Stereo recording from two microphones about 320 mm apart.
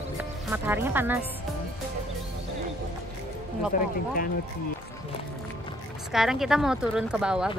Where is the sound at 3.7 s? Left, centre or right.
Left.